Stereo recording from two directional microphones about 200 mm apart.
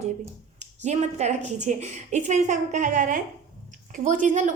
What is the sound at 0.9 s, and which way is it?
A woman's voice, 35° right (ahead or behind).